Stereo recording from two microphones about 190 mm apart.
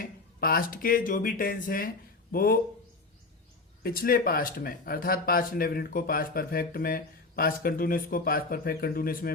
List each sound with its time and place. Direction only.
0.0 s speech: 50° left (ahead or behind)
3.8 s speech: 50° left (ahead or behind)